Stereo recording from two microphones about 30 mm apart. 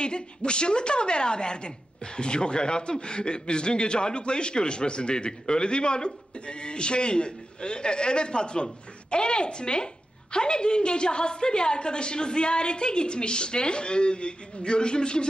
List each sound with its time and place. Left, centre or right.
0.0 s a man's voice: left